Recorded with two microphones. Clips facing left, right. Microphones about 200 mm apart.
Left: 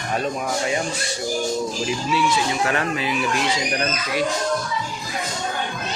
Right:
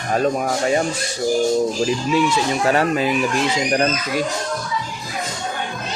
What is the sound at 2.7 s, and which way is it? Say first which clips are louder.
Speech: right 6 dB; 40° right (ahead or behind).